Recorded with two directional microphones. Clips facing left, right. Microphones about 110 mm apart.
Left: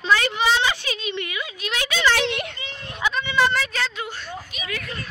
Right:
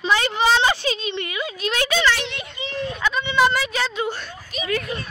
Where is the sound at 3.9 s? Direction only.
30° right (ahead or behind).